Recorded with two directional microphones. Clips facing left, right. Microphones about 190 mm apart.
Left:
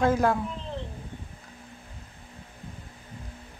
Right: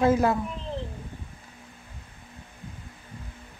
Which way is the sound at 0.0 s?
10° right (ahead or behind).